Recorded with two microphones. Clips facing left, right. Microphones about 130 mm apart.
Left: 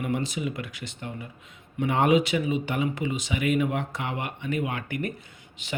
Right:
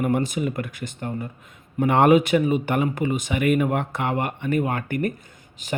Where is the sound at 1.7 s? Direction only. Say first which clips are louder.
Right 5 dB; 60° right (ahead or behind).